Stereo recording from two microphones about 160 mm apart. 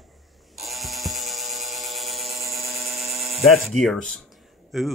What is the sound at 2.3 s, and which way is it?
Tools, 20° right (ahead or behind).